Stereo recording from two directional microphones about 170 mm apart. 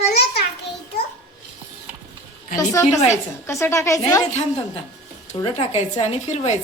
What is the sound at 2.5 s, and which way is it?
A woman's voice, 20° left (ahead or behind).